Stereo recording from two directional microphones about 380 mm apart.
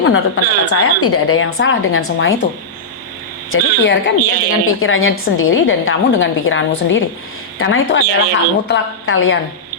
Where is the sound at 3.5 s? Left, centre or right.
Left.